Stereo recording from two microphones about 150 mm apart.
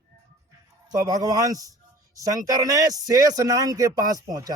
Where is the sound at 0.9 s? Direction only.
25° right (ahead or behind).